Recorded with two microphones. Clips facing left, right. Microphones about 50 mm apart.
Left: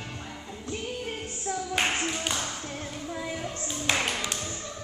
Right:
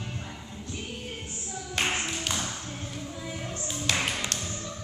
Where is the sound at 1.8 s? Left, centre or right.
Centre.